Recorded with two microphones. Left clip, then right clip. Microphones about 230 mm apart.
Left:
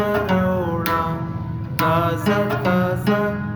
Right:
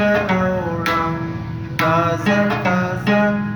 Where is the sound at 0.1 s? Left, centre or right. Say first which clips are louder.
Right 3 dB; left.